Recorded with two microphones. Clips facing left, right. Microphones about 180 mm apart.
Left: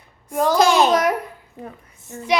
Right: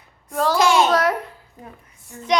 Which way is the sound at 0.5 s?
40° left (ahead or behind).